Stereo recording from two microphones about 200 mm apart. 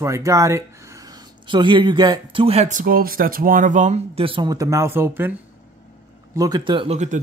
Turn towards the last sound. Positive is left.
turn(degrees=-35)  # may be behind; listen again after turning